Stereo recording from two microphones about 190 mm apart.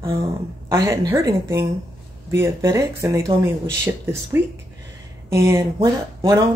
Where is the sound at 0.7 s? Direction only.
15° right (ahead or behind).